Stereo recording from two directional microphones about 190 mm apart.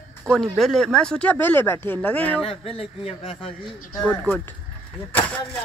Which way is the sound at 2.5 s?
30° left (ahead or behind).